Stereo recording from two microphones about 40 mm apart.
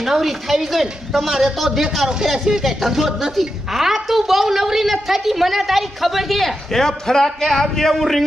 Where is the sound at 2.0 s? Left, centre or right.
Centre.